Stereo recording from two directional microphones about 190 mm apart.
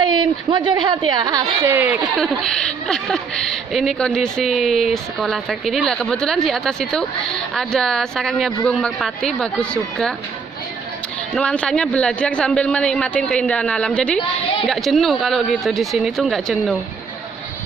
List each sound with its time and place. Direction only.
0.0 s a woman's voice: 25° right (ahead or behind)
2.1 s speech: centre (ahead or behind)
11.3 s speech: 5° left (ahead or behind)